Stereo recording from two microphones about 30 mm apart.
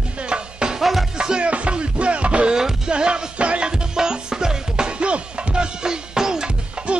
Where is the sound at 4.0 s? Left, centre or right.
Right.